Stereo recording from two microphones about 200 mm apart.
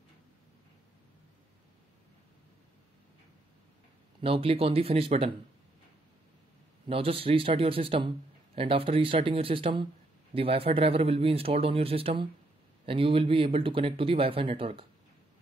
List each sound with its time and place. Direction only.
4.2 s speech: 30° right (ahead or behind)
6.9 s speech: 25° right (ahead or behind)